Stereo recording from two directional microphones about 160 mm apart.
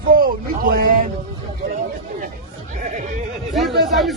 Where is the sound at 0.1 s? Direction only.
65° right (ahead or behind).